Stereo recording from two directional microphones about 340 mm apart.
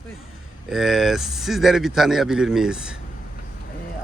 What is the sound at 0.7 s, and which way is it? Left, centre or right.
Speech, centre.